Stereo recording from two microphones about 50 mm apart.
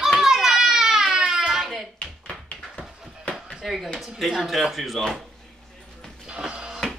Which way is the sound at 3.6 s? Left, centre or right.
Centre.